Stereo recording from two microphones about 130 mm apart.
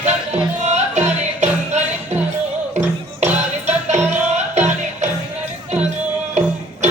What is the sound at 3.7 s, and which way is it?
Music, 60° right (ahead or behind).